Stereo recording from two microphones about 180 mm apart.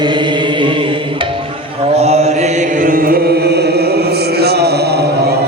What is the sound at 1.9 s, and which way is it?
Chant, 35° right (ahead or behind).